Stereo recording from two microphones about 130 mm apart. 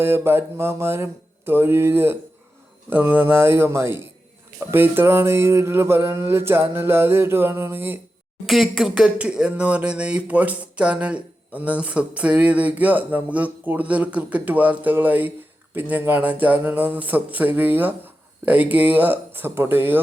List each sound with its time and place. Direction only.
0.0 s speech: 20° right (ahead or behind)
8.4 s speech: centre (ahead or behind)